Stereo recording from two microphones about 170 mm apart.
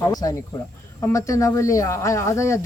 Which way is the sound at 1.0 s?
20° left (ahead or behind).